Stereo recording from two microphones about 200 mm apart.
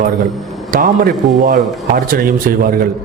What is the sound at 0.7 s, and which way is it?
Speech, 45° right (ahead or behind).